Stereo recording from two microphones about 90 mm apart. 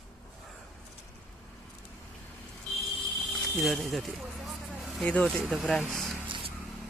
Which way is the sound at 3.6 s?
Centre (ahead or behind).